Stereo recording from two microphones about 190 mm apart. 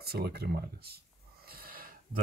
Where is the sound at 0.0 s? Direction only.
55° right (ahead or behind).